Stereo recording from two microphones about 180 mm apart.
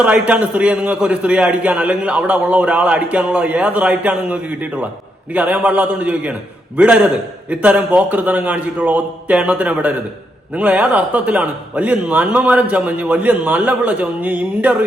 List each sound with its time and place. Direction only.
0.0 s a man's voice: 5° right (ahead or behind)